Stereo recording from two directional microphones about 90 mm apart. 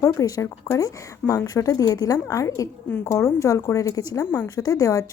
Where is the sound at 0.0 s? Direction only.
40° left (ahead or behind).